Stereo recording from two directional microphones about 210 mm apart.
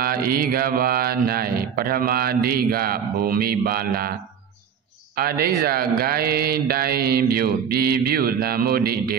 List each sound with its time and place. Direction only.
0.0 s mantra: 45° right (ahead or behind)
5.1 s mantra: 45° right (ahead or behind)